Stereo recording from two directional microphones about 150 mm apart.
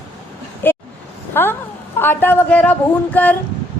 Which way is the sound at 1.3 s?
15° left (ahead or behind).